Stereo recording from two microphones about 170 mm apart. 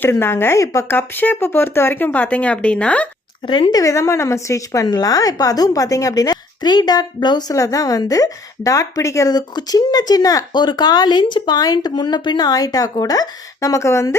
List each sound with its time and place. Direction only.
0.0 s speech: 15° left (ahead or behind)
3.4 s speech: 30° left (ahead or behind)